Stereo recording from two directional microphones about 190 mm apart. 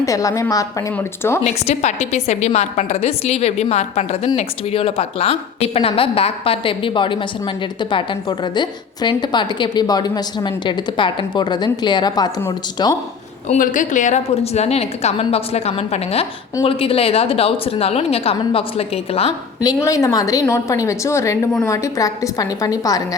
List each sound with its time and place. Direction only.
0.0 s a woman's voice: 15° left (ahead or behind)
1.5 s a woman's voice: 35° left (ahead or behind); by 13.0 s 20° left (ahead or behind)
13.5 s a woman's voice: 45° left (ahead or behind)
19.6 s a woman's voice: 15° left (ahead or behind)